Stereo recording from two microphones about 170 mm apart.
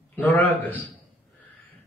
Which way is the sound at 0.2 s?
10° left (ahead or behind).